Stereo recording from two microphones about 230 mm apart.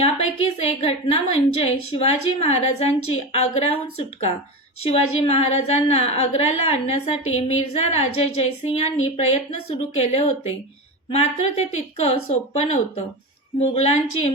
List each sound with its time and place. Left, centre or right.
0.6 s a woman's voice: left